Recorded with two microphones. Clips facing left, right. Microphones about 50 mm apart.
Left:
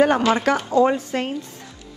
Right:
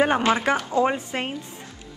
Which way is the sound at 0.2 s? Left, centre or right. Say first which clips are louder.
Left 2 dB; right.